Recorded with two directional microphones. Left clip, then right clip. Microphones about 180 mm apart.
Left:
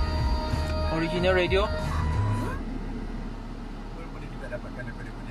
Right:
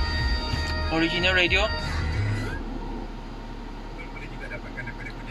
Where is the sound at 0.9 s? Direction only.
45° left (ahead or behind).